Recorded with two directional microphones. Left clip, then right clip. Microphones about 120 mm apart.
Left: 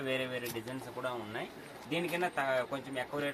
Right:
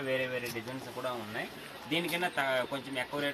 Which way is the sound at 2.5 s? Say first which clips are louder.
Right 1 dB; 25° left (ahead or behind).